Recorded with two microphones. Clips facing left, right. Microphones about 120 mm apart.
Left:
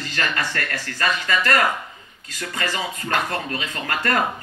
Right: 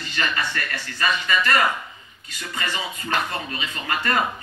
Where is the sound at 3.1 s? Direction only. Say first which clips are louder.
Left 2 dB; 50° left (ahead or behind).